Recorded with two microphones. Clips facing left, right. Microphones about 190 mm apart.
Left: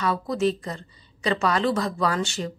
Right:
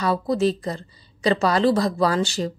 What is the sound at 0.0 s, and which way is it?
A woman's voice, 35° right (ahead or behind).